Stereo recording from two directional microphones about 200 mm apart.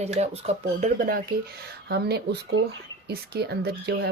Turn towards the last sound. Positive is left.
turn(degrees=-55)  # may be behind; listen again after turning